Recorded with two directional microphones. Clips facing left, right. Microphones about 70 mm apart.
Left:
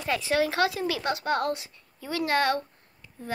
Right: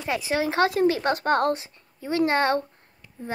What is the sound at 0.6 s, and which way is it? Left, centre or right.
Speech, right.